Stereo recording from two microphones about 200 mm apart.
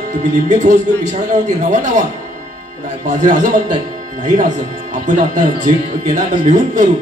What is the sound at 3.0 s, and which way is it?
Speech, 40° right (ahead or behind).